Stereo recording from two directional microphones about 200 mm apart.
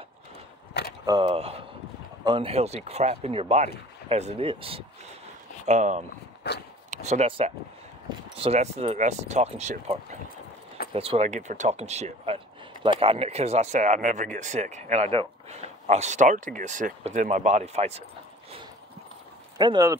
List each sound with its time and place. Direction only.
1.0 s speech: 25° right (ahead or behind)
6.4 s speech: 55° left (ahead or behind)
6.9 s speech: 35° right (ahead or behind)
19.6 s speech: 20° right (ahead or behind)